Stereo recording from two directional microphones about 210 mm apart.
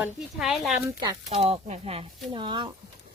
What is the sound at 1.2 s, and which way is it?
Speech, 30° right (ahead or behind).